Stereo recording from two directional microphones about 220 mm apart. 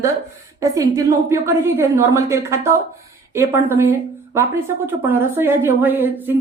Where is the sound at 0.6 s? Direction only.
15° right (ahead or behind).